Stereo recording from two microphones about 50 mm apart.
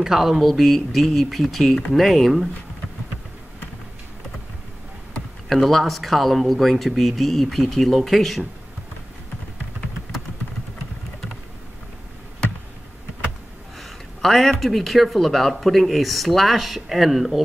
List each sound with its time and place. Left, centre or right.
0.0 s speech: centre
5.5 s speech: centre
13.7 s speech: centre